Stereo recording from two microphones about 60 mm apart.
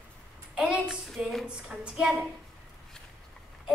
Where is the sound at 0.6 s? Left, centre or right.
Centre.